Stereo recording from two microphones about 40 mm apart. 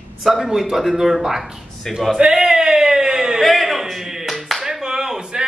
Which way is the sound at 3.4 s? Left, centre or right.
Centre.